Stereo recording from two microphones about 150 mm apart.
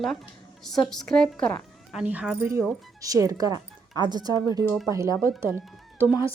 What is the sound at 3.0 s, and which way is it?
Speech, 20° right (ahead or behind).